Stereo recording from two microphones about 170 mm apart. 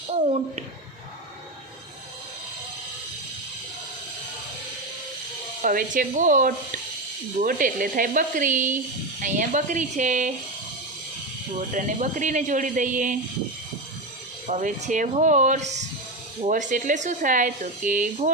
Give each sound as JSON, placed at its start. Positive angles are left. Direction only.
{"t": 0.1, "sound": "a sound", "side_deg": -40}
{"t": 5.6, "sound": "speech", "side_deg": -55}
{"t": 11.7, "sound": "speech", "side_deg": -50}
{"t": 14.4, "sound": "speech", "side_deg": -45}